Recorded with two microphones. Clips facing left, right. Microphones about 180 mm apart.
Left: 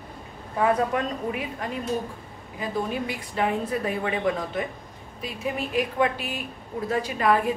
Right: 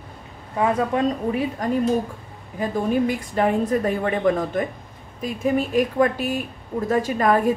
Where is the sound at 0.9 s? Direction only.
35° right (ahead or behind).